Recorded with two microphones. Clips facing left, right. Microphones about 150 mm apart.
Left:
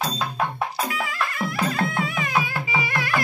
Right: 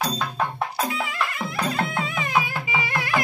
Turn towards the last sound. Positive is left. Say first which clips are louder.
# even
turn(degrees=-20)  # may be behind; listen again after turning